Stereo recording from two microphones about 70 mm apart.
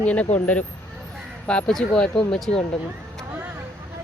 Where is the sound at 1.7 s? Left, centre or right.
Centre.